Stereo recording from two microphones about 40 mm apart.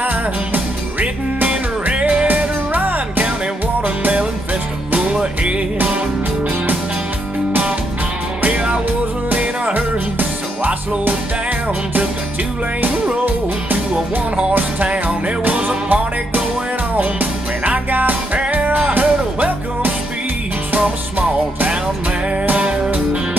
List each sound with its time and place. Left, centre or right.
0.0 s music: right
1.5 s music: right
2.2 s music: right
5.1 s music: right
8.4 s music: right
9.8 s music: right
12.8 s music: right
15.0 s music: right